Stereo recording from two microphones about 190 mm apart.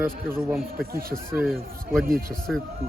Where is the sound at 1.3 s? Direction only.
Centre (ahead or behind).